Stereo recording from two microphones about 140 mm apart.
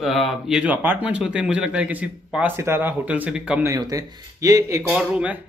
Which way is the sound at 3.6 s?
25° right (ahead or behind).